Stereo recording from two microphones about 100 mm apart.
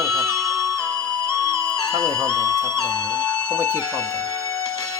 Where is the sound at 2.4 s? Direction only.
30° right (ahead or behind).